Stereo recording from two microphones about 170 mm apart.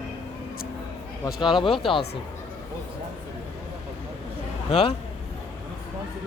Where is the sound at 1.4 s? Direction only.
30° left (ahead or behind).